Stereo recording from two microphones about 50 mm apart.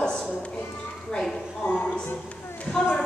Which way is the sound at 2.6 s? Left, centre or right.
Left.